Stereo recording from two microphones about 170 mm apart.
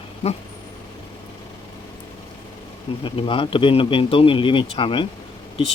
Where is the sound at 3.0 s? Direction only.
30° left (ahead or behind).